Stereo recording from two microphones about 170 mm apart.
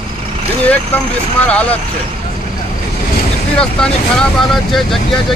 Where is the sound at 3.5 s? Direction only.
5° left (ahead or behind).